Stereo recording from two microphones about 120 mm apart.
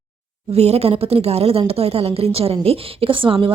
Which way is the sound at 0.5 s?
60° right (ahead or behind).